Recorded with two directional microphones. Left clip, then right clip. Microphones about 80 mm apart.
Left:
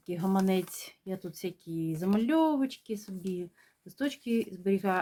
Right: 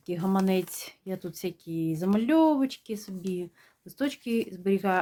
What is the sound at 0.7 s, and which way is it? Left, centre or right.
Speech, right.